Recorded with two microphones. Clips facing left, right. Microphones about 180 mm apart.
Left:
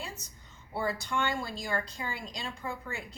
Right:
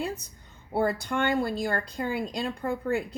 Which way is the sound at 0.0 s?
60° right (ahead or behind).